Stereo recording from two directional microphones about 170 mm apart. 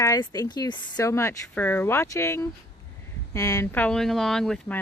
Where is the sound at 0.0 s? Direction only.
20° left (ahead or behind).